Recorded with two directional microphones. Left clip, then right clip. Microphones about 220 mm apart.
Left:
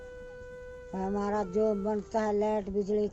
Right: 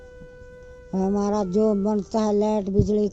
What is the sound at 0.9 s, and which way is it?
Speech, 45° right (ahead or behind).